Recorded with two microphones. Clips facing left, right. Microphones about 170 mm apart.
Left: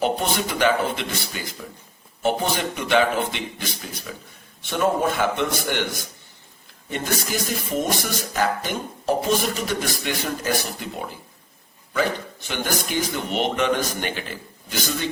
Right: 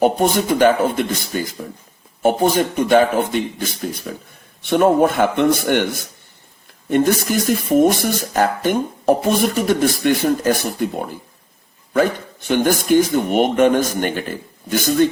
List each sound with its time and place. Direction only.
0.0 s a man's voice: 50° right (ahead or behind)